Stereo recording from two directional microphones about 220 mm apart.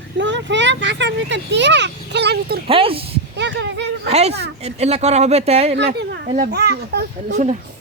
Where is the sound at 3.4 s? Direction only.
55° right (ahead or behind).